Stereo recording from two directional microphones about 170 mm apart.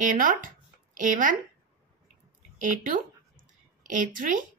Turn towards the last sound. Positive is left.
turn(degrees=-50)  # may be behind; listen again after turning